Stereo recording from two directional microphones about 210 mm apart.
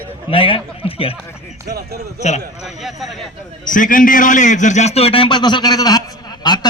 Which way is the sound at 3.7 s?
40° left (ahead or behind).